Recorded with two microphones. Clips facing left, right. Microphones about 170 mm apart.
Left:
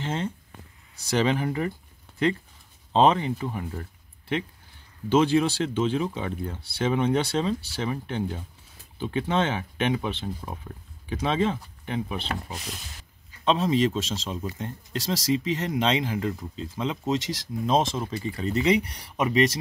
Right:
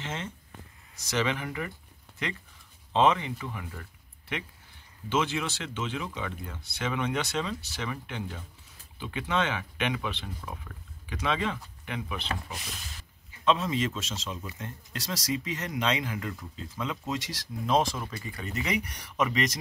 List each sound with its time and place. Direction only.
0.0 s speech: 35° left (ahead or behind)
5.1 s a man's voice: 35° left (ahead or behind)